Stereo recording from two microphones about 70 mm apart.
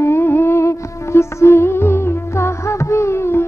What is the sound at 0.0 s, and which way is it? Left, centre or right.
Music, left.